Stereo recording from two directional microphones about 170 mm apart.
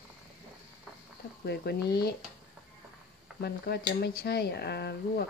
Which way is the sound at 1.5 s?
70° left (ahead or behind).